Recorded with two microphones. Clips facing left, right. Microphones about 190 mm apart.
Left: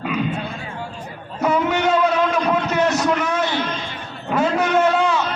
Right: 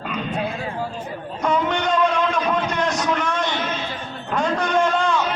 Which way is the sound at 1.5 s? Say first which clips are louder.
Left 3 dB; 5° left (ahead or behind).